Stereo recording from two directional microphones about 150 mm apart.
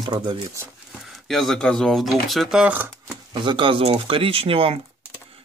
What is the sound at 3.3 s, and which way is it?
Speech, 30° right (ahead or behind).